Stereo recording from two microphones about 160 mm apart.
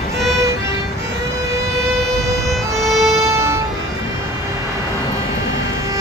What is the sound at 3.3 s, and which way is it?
Music, 15° right (ahead or behind).